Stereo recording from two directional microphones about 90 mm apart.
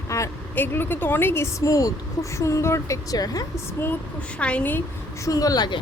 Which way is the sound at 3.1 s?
45° left (ahead or behind).